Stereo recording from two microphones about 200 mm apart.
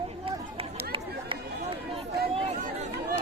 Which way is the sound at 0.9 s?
25° right (ahead or behind).